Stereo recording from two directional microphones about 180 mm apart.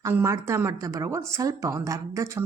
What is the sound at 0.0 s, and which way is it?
A woman's voice, 15° right (ahead or behind).